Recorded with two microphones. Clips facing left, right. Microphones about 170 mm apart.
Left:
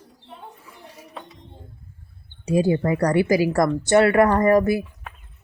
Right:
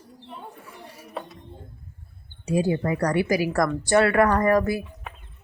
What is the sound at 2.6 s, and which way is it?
A woman's voice, 30° left (ahead or behind).